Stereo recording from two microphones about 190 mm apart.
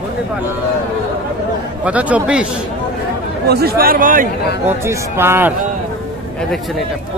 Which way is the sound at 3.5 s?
55° right (ahead or behind).